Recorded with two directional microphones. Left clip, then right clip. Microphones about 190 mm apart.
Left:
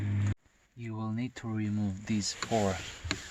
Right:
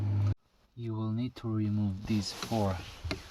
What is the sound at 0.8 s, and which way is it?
Speech, 30° left (ahead or behind).